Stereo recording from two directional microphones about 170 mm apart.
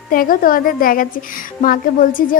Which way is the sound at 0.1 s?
55° left (ahead or behind).